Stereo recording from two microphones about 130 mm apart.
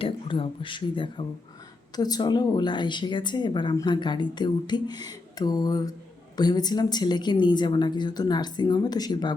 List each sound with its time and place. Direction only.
0.0 s a woman's voice: 45° left (ahead or behind)